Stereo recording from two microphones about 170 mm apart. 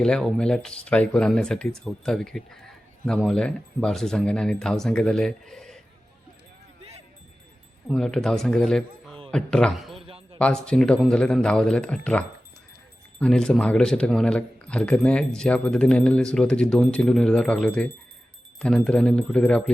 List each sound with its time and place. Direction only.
0.0 s speech: 5° left (ahead or behind)
7.9 s speech: 5° left (ahead or behind)